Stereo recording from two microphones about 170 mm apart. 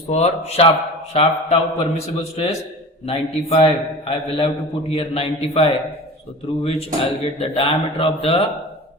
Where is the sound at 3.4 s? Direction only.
35° left (ahead or behind).